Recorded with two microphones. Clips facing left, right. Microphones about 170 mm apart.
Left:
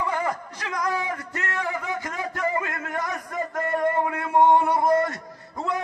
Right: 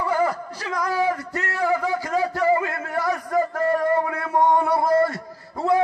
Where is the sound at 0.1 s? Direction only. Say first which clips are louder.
Right 5 dB; 35° right (ahead or behind).